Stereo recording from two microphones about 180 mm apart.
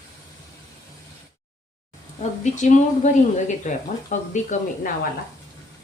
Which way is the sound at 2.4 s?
45° left (ahead or behind).